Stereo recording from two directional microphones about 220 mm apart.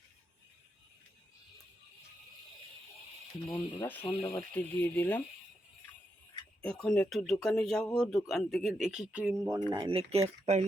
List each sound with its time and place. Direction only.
3.4 s speech: 15° left (ahead or behind)
6.6 s speech: 5° left (ahead or behind)
9.7 s speech: 25° right (ahead or behind)